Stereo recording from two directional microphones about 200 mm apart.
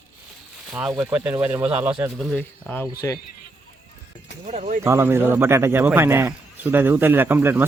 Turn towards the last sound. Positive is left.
turn(degrees=-10)  # may be behind; listen again after turning